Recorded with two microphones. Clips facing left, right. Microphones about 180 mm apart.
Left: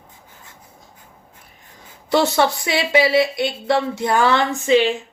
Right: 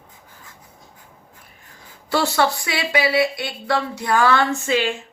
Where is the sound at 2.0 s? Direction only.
20° left (ahead or behind).